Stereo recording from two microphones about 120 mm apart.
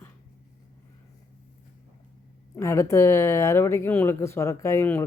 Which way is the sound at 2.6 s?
25° left (ahead or behind).